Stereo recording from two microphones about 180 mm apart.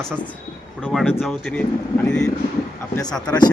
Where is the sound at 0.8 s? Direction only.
5° right (ahead or behind).